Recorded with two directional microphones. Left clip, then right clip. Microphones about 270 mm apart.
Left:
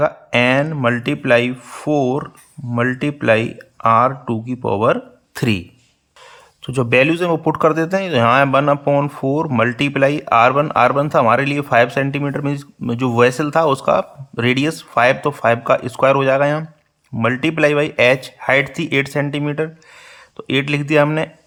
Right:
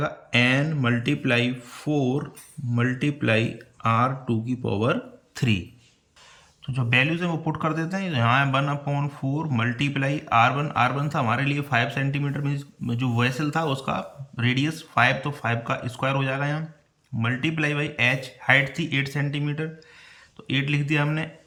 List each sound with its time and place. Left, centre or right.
0.0 s speech: centre